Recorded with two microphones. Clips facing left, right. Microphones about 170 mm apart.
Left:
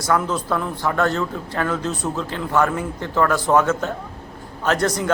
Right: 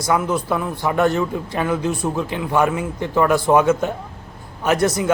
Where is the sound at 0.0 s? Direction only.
10° right (ahead or behind).